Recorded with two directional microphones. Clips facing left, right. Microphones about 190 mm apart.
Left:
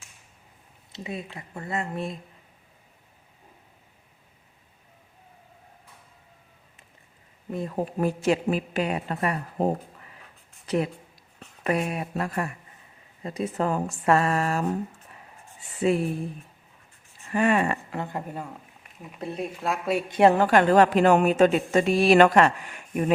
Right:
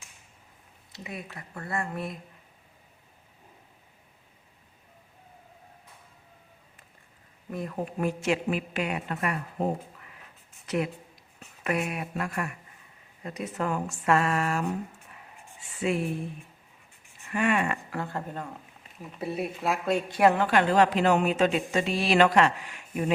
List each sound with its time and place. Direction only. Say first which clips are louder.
0.9 s speech: left 5 dB; 25° left (ahead or behind)
7.5 s a woman's voice: left 4 dB; 25° left (ahead or behind)
11.6 s a woman's voice: left 3 dB; 30° left (ahead or behind)
15.8 s a woman's voice: left 5 dB; 35° left (ahead or behind)
17.3 s a woman's voice: left 4 dB; 35° left (ahead or behind)
17.9 s speech: left 1 dB; 20° left (ahead or behind)
19.2 s speech: even; 5° right (ahead or behind)
20.1 s speech: left 4 dB; 25° left (ahead or behind)
20.3 s a woman's voice: left 4 dB; 45° left (ahead or behind)